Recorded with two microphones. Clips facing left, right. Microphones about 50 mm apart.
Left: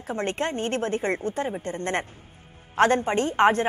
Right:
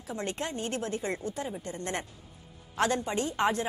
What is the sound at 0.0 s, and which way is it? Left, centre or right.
A woman's voice, left.